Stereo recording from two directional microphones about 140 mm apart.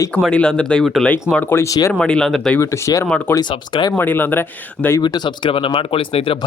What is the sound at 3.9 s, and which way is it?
Speech, 15° left (ahead or behind).